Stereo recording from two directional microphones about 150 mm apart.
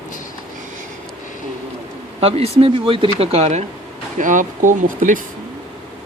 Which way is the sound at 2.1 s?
45° right (ahead or behind).